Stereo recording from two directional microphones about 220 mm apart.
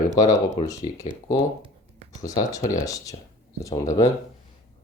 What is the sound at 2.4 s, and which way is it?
Speech, 15° left (ahead or behind).